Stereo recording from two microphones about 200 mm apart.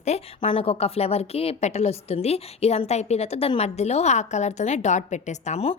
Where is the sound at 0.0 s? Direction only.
30° left (ahead or behind).